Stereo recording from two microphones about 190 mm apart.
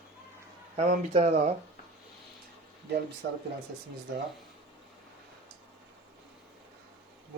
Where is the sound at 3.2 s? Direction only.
65° right (ahead or behind).